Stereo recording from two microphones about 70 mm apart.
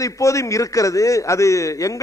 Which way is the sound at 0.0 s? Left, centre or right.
Left.